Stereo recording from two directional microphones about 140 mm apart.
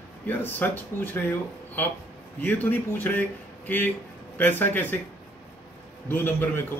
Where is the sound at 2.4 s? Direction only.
15° left (ahead or behind).